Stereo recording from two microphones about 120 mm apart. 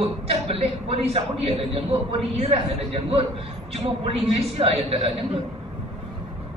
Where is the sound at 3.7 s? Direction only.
55° right (ahead or behind).